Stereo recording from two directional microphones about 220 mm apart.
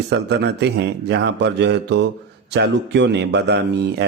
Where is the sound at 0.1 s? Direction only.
50° right (ahead or behind).